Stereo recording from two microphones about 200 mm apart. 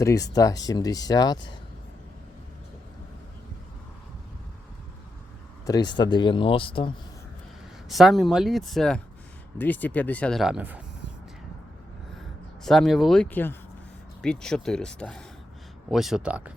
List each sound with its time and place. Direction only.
0.0 s speech: 15° left (ahead or behind)
5.6 s speech: 20° left (ahead or behind)
7.9 s speech: centre (ahead or behind)
12.6 s speech: centre (ahead or behind)